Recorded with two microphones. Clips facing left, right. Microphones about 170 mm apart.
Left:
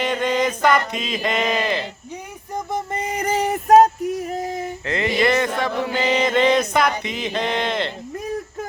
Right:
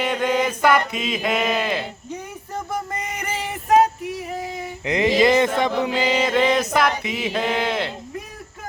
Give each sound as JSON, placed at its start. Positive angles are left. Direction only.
{"t": 0.0, "sound": "music", "side_deg": -5}
{"t": 2.7, "sound": "a sound", "side_deg": 30}
{"t": 4.9, "sound": "speech", "side_deg": -15}
{"t": 5.9, "sound": "music", "side_deg": -10}